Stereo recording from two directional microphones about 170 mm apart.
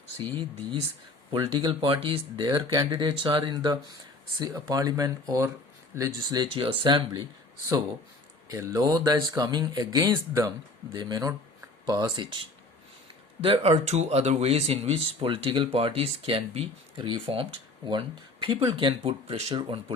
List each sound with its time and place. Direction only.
0.3 s speech: 30° right (ahead or behind)
8.4 s speech: 20° right (ahead or behind)
13.4 s speech: 35° right (ahead or behind)